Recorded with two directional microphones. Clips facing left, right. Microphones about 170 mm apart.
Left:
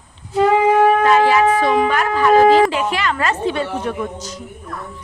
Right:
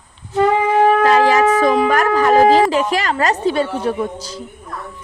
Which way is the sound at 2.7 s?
40° right (ahead or behind).